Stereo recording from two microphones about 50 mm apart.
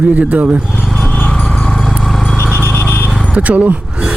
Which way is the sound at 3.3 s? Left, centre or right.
Right.